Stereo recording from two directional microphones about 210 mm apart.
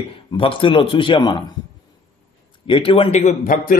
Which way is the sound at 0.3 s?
25° left (ahead or behind).